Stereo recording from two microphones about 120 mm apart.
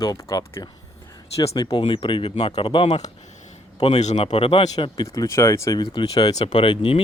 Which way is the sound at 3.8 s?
65° left (ahead or behind).